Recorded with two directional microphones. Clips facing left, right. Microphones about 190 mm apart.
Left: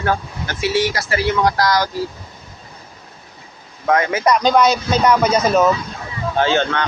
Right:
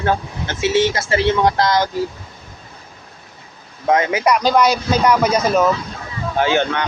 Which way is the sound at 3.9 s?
20° right (ahead or behind).